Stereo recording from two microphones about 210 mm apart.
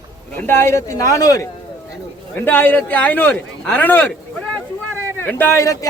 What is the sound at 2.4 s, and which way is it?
Speech, 10° left (ahead or behind).